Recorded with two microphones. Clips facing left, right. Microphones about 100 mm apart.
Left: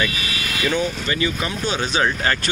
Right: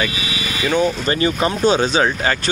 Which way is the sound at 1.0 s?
40° right (ahead or behind).